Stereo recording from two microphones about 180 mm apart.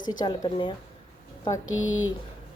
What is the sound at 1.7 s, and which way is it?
Speech, 90° left.